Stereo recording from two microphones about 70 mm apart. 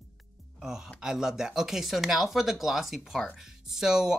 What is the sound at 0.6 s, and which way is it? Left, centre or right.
Speech, centre.